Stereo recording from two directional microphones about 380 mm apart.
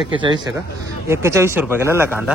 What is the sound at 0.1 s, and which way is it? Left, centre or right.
A man's voice, centre.